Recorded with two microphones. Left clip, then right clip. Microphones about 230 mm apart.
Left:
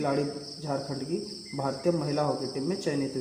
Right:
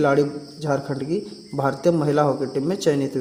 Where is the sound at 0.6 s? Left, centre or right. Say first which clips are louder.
Right 9 dB; right.